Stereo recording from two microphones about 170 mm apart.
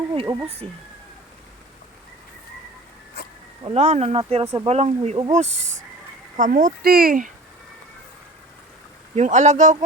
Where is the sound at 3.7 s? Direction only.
40° right (ahead or behind).